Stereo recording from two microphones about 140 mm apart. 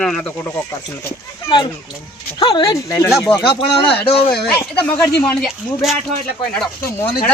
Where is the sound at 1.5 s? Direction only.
35° left (ahead or behind).